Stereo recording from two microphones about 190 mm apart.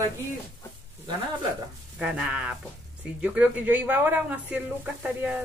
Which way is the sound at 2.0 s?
5° right (ahead or behind).